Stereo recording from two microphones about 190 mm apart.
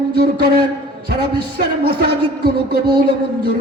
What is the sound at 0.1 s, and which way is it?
Speech, 55° right (ahead or behind).